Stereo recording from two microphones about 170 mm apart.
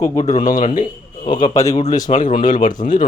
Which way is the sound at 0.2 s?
40° left (ahead or behind).